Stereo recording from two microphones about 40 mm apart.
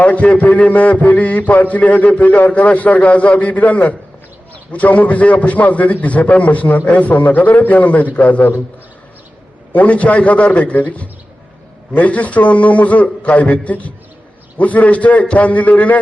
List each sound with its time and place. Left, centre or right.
0.0 s a man's voice: left
9.7 s a man's voice: left